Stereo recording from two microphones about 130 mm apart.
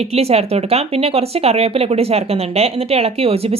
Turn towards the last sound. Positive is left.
turn(degrees=-50)  # may be behind; listen again after turning